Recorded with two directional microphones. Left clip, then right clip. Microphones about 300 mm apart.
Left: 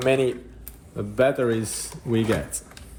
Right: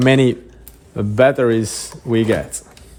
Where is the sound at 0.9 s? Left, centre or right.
Right.